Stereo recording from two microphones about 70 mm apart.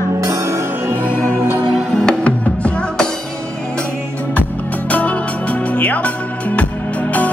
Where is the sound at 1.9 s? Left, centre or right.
Centre.